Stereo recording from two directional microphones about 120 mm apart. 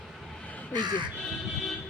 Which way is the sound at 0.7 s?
35° right (ahead or behind).